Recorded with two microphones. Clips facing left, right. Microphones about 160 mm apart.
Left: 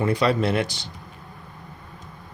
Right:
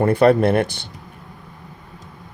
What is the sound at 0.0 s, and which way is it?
Speech, 55° right (ahead or behind).